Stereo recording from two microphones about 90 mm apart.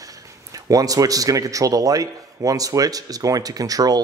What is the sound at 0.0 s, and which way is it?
Speech, 40° right (ahead or behind).